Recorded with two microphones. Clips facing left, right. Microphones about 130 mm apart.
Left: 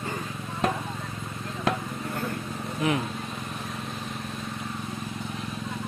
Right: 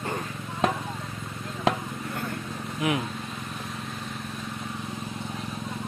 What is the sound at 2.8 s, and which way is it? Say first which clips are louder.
Speech: left 1 dB; 10° right (ahead or behind).